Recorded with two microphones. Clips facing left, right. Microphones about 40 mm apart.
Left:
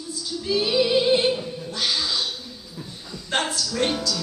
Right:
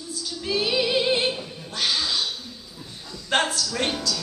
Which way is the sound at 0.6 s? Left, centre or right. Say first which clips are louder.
Left 3 dB; centre.